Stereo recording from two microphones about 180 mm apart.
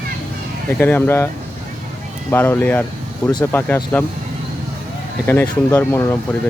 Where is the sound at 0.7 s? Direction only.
10° left (ahead or behind).